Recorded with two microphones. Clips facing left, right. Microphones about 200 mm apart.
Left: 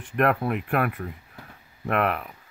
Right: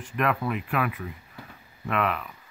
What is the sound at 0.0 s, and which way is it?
Speech, 60° left (ahead or behind).